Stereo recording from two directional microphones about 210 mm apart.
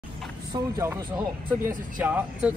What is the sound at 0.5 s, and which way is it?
Speech, 15° right (ahead or behind).